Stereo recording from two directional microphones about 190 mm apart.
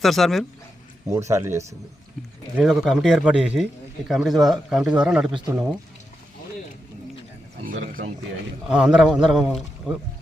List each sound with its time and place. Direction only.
0.0 s a man's voice: centre (ahead or behind)
1.0 s speech: 15° right (ahead or behind)
2.6 s a man's voice: centre (ahead or behind)
7.6 s speech: 45° right (ahead or behind)
8.7 s a man's voice: 5° right (ahead or behind)